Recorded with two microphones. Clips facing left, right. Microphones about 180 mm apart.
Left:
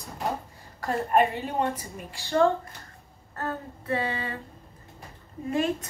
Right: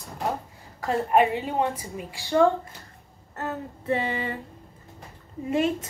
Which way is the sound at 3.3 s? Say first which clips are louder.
Right 1 dB; 20° right (ahead or behind).